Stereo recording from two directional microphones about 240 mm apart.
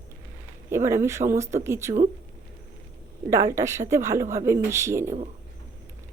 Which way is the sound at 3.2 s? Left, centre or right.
Centre.